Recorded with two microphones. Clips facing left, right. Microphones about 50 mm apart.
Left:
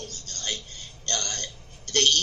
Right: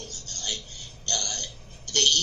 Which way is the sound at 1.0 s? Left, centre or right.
Left.